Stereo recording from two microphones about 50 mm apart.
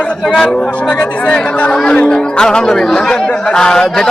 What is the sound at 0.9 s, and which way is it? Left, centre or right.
A man's voice, left.